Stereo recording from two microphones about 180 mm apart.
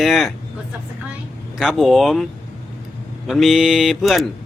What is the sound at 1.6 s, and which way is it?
Speech, centre (ahead or behind).